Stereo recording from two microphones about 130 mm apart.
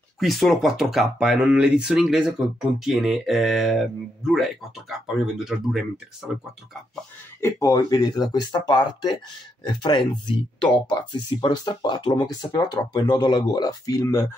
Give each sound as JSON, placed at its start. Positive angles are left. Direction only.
{"t": 0.2, "sound": "speech", "side_deg": 0}
{"t": 7.3, "sound": "speech", "side_deg": 25}